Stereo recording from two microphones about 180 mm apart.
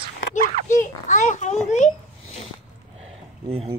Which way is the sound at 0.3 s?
45° left (ahead or behind).